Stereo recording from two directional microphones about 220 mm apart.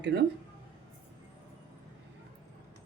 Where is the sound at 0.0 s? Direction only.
50° right (ahead or behind).